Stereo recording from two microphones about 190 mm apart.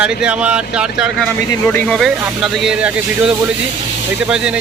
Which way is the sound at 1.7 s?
5° left (ahead or behind).